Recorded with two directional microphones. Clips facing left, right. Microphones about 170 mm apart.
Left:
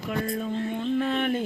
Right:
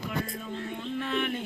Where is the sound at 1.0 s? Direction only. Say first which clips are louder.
Left 3 dB; 40° left (ahead or behind).